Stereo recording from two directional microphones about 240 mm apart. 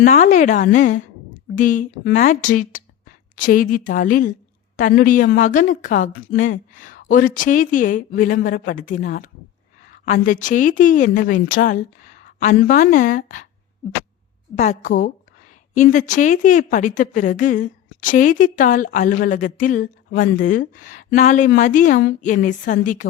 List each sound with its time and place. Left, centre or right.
0.0 s a woman's voice: left
14.5 s a woman's voice: left